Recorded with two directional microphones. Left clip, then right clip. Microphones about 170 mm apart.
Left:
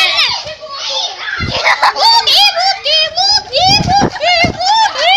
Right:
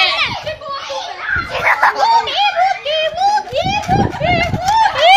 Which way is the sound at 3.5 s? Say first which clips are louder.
Left 6 dB; 60° left (ahead or behind).